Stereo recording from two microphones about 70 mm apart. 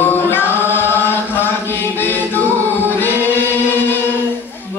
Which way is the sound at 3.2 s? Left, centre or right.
Left.